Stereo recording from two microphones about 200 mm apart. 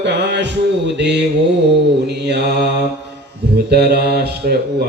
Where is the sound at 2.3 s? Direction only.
55° right (ahead or behind).